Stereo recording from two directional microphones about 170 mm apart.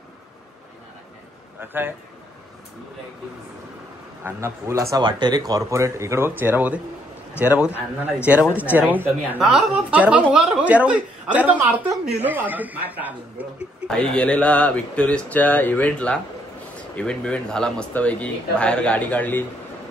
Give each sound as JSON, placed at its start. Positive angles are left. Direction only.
{"t": 1.6, "sound": "a woman's voice", "side_deg": -10}
{"t": 4.2, "sound": "a woman's voice", "side_deg": -15}
{"t": 13.8, "sound": "speech", "side_deg": 5}